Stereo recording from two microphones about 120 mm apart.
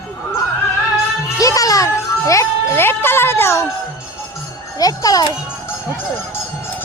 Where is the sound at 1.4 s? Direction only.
30° left (ahead or behind).